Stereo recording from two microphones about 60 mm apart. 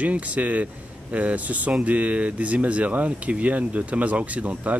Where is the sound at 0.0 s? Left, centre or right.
Right.